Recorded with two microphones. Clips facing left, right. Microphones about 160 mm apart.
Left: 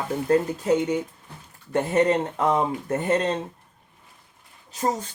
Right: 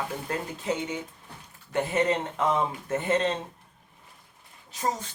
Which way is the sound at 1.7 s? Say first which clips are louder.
Left 5 dB; 40° left (ahead or behind).